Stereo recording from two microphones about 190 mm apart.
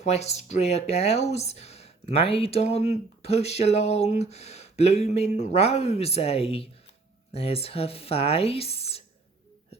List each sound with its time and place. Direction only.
0.0 s speech: 35° left (ahead or behind)